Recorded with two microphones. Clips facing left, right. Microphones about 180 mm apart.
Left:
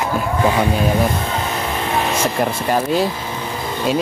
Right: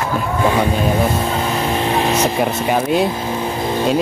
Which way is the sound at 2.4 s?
5° right (ahead or behind).